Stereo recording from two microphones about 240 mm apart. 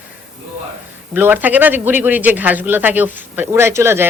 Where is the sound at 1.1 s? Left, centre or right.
Centre.